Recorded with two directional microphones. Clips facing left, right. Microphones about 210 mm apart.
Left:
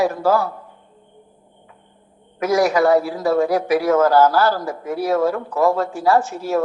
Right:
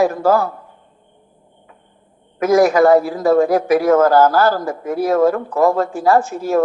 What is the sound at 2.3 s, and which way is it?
A woman's voice, 50° right (ahead or behind).